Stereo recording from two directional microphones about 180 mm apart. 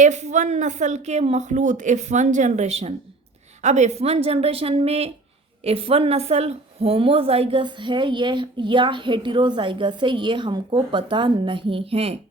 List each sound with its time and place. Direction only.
0.0 s a woman's voice: 40° right (ahead or behind)